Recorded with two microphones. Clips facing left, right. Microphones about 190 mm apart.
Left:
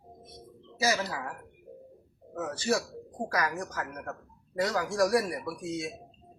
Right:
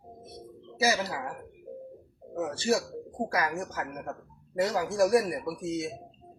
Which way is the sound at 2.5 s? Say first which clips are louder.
Right 1 dB; 25° right (ahead or behind).